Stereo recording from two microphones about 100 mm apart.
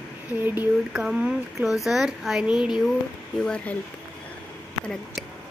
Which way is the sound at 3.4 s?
10° left (ahead or behind).